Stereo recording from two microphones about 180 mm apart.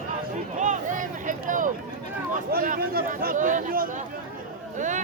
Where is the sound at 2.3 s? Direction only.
50° right (ahead or behind).